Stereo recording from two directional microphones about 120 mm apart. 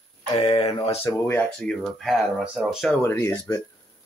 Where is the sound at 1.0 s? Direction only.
20° left (ahead or behind); by 3.0 s centre (ahead or behind).